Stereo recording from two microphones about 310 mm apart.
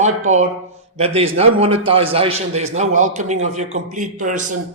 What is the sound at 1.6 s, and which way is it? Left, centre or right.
A man's voice, centre.